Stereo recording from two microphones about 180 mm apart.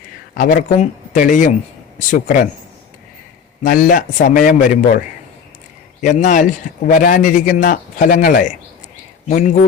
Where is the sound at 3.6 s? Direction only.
50° left (ahead or behind).